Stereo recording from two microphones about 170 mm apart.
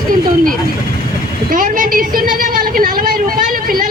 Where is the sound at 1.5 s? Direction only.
55° right (ahead or behind).